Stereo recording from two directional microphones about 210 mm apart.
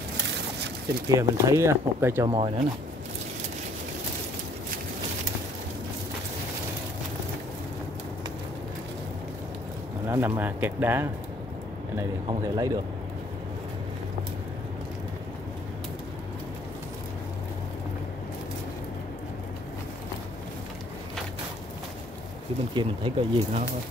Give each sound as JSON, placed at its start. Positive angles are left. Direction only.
{"t": 1.0, "sound": "speech", "side_deg": -15}
{"t": 2.2, "sound": "speech", "side_deg": -25}
{"t": 10.0, "sound": "speech", "side_deg": -10}
{"t": 22.8, "sound": "speech", "side_deg": -25}